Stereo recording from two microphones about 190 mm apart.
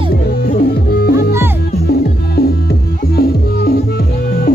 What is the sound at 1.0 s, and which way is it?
Music, 55° left (ahead or behind).